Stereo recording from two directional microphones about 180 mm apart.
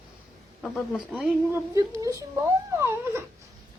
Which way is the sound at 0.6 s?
Centre (ahead or behind).